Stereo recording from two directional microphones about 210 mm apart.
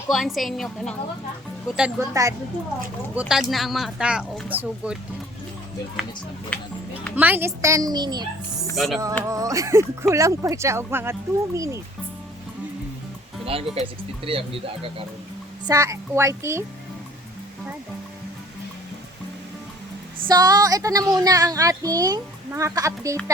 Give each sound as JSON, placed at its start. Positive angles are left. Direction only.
{"t": 0.1, "sound": "speech", "side_deg": 0}
{"t": 2.0, "sound": "speech", "side_deg": -15}
{"t": 3.2, "sound": "speech", "side_deg": -5}
{"t": 7.2, "sound": "speech", "side_deg": -10}
{"t": 8.7, "sound": "speech", "side_deg": 0}
{"t": 9.3, "sound": "speech", "side_deg": -15}
{"t": 13.4, "sound": "speech", "side_deg": -25}
{"t": 15.6, "sound": "speech", "side_deg": -15}
{"t": 20.2, "sound": "speech", "side_deg": -20}